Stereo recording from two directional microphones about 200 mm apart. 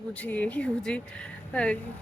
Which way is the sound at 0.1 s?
5° left (ahead or behind).